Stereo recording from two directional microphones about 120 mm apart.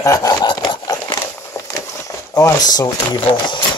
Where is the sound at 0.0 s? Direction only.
25° left (ahead or behind).